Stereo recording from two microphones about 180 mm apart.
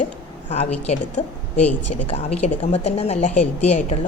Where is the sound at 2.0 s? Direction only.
35° left (ahead or behind).